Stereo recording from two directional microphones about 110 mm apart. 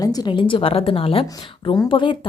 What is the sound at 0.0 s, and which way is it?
A woman's voice, 35° left (ahead or behind).